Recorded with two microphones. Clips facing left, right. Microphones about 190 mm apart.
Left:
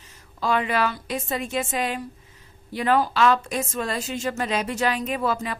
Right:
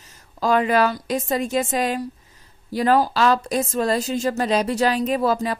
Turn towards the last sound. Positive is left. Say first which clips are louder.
# right 5 dB
turn(degrees=-35)  # may be behind; listen again after turning